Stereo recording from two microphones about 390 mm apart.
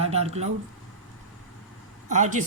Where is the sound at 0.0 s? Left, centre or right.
Centre.